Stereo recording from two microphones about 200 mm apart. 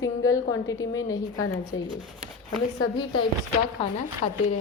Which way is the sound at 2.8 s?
25° left (ahead or behind).